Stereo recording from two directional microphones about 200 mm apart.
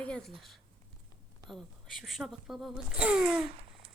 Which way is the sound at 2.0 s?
Centre (ahead or behind).